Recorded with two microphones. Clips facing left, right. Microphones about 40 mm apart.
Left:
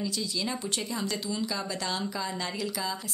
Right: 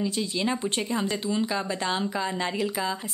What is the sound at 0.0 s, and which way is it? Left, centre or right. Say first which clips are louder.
Speech: right 5 dB; right.